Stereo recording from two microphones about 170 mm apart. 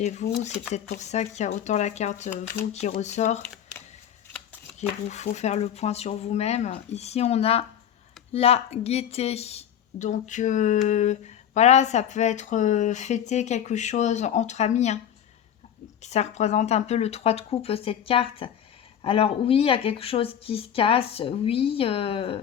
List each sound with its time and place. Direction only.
0.0 s speech: 45° left (ahead or behind)
5.0 s speech: 40° left (ahead or behind)
16.0 s speech: 40° left (ahead or behind)